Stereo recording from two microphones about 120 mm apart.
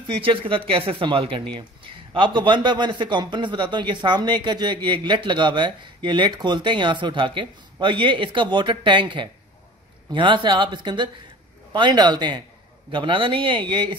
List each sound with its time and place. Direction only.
0.1 s speech: 45° right (ahead or behind)